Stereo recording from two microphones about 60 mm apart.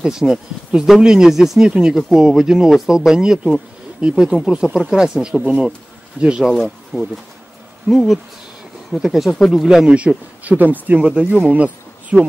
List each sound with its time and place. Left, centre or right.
0.0 s speech: centre
6.5 s speech: centre
9.8 s speech: right